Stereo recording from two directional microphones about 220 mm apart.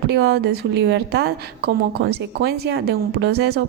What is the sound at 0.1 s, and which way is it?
A woman's voice, 45° right (ahead or behind).